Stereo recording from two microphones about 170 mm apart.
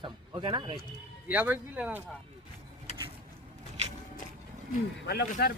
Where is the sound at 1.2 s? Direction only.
10° right (ahead or behind).